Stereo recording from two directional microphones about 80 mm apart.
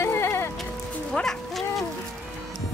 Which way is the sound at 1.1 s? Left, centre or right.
Centre.